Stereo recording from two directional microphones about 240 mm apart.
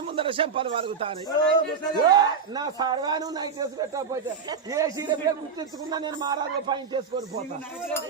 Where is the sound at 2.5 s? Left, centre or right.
Centre.